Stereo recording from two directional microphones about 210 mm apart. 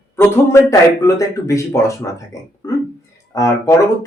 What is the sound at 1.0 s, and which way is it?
Speech, 15° left (ahead or behind).